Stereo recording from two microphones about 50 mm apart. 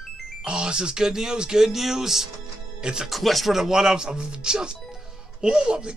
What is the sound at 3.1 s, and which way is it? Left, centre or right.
Speech, centre.